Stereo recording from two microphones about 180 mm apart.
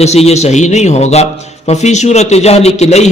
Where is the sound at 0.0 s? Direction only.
35° left (ahead or behind).